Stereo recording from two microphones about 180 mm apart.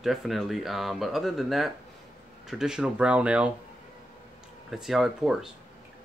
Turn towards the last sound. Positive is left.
turn(degrees=0)  # may be behind; listen again after turning